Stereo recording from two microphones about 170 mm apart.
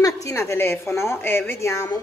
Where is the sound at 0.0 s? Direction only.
20° left (ahead or behind).